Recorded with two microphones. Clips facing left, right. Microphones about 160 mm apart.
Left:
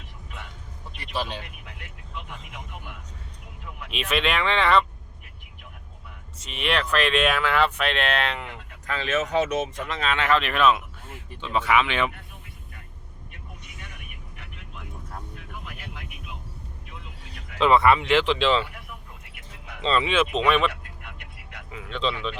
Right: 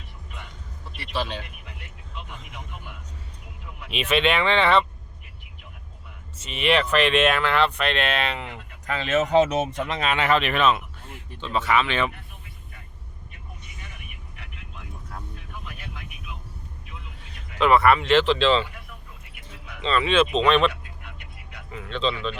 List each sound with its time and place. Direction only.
3.9 s speech: centre (ahead or behind)
6.4 s speech: 5° right (ahead or behind)
8.9 s speech: 25° right (ahead or behind)
10.0 s speech: 10° right (ahead or behind); by 12.1 s 15° left (ahead or behind)
17.6 s speech: 20° left (ahead or behind)
19.8 s speech: 30° left (ahead or behind)
20.1 s speech: 10° left (ahead or behind)
21.7 s speech: 10° left (ahead or behind)